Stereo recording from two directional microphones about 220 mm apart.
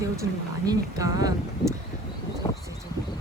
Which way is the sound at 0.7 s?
15° right (ahead or behind).